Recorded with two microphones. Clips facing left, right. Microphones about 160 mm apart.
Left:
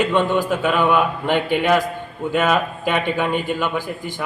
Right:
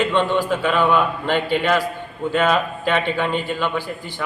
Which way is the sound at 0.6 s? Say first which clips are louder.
Left 1 dB; 15° left (ahead or behind).